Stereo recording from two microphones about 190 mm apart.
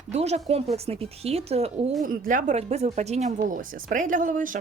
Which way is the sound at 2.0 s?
45° right (ahead or behind).